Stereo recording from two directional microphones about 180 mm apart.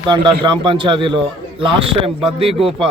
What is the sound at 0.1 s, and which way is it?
A man's voice, 25° right (ahead or behind).